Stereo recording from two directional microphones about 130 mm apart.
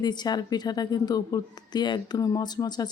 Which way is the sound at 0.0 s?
30° left (ahead or behind).